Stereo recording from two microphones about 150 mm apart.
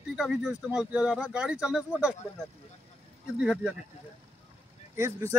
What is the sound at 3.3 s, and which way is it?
Speech, 5° right (ahead or behind).